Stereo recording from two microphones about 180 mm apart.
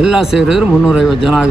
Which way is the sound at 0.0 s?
Centre (ahead or behind).